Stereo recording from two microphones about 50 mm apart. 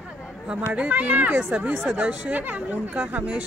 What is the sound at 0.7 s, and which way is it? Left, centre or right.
Speech, right.